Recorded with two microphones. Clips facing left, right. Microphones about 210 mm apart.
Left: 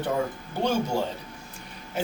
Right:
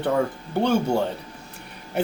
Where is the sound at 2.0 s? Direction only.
65° right (ahead or behind).